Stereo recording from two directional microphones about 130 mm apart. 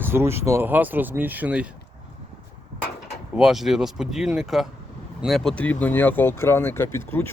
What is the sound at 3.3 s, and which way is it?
Speech, 5° right (ahead or behind).